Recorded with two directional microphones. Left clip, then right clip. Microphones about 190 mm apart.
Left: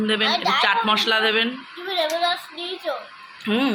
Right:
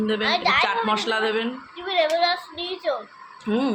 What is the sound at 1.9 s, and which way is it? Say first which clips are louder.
A child's voice: right 1 dB; 20° right (ahead or behind).